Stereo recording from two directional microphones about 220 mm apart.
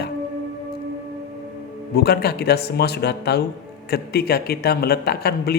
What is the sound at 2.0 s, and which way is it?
Speech, 45° left (ahead or behind).